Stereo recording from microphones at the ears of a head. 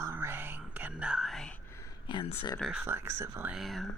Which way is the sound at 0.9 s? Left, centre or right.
Centre.